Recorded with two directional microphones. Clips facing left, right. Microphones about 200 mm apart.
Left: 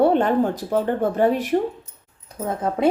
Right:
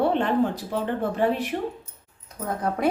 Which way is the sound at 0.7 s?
45° left (ahead or behind).